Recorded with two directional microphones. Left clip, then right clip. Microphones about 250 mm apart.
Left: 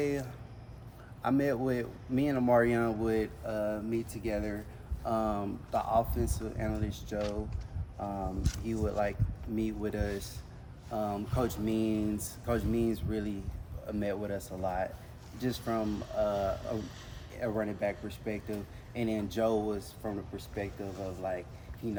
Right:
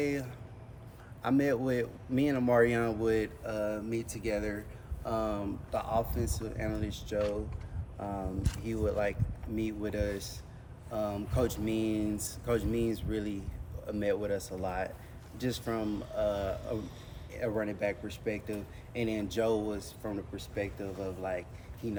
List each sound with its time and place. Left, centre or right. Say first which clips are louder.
0.0 s speech: even; centre
8.6 s speech: right 1 dB; centre
16.6 s speech: even; left
17.3 s speech: even; centre